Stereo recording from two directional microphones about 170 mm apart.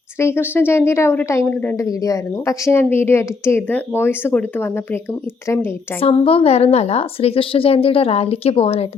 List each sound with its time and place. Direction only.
0.2 s a woman's voice: 15° left (ahead or behind)
6.0 s a woman's voice: 35° left (ahead or behind)